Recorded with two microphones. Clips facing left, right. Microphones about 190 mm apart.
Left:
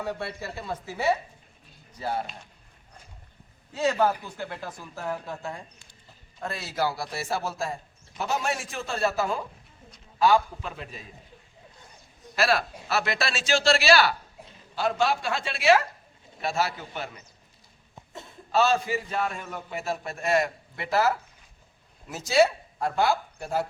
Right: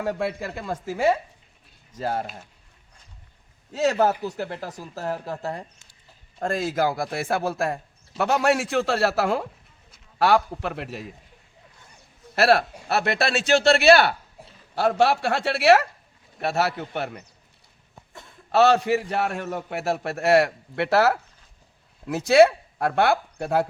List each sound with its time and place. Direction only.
0.4 s speech: 50° right (ahead or behind)
3.8 s speech: 40° right (ahead or behind)
6.4 s a man's voice: 50° right (ahead or behind); by 11.1 s 75° right (ahead or behind)
12.3 s a man's voice: 65° right (ahead or behind)
14.8 s a man's voice: 70° right (ahead or behind)
18.5 s a man's voice: 70° right (ahead or behind)